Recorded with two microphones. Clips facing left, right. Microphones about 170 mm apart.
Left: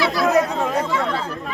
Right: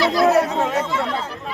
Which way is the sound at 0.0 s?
40° right (ahead or behind).